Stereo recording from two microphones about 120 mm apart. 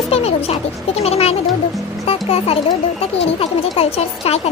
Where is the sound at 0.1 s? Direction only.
55° left (ahead or behind).